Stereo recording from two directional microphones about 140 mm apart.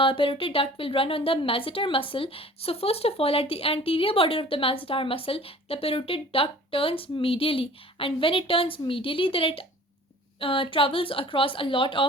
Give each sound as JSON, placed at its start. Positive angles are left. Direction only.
{"t": 0.0, "sound": "speech", "side_deg": 40}